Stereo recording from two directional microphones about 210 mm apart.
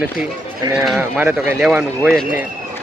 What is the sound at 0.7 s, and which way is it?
Speech, 5° right (ahead or behind).